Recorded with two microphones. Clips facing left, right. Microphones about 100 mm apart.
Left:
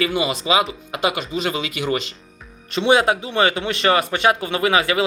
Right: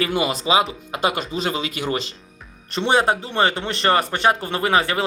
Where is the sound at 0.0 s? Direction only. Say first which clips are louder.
Even; 40° right (ahead or behind).